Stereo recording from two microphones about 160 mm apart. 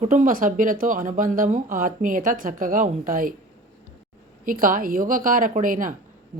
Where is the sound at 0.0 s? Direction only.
50° right (ahead or behind).